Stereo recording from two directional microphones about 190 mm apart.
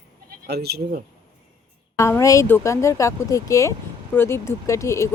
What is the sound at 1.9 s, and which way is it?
Speech, 15° left (ahead or behind).